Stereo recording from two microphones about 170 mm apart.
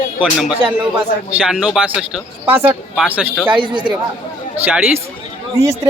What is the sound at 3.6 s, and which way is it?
Speech, 30° right (ahead or behind).